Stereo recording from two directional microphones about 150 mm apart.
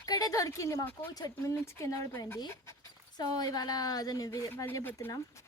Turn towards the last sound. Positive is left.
turn(degrees=20)  # may be behind; listen again after turning